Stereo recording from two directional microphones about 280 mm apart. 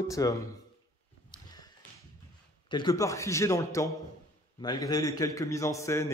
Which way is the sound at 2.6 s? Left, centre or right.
Centre.